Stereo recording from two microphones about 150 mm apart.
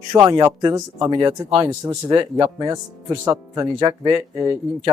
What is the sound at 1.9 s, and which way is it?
Speech, 30° right (ahead or behind).